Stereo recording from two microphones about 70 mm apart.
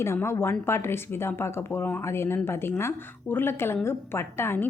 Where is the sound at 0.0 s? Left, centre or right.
Left.